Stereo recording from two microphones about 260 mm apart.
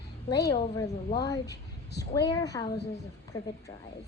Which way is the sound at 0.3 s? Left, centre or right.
Centre.